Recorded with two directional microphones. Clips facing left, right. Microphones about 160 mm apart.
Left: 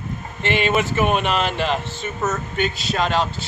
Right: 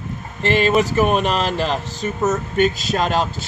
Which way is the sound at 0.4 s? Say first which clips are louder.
Right 4 dB; 40° right (ahead or behind).